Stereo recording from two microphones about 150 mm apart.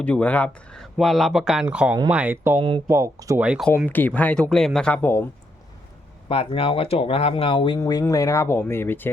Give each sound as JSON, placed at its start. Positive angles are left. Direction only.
{"t": 0.0, "sound": "speech", "side_deg": 10}
{"t": 2.6, "sound": "speech", "side_deg": -35}
{"t": 2.8, "sound": "speech", "side_deg": -20}
{"t": 3.4, "sound": "speech", "side_deg": -5}
{"t": 3.8, "sound": "speech", "side_deg": 10}
{"t": 6.2, "sound": "speech", "side_deg": 40}
{"t": 7.8, "sound": "speech", "side_deg": 25}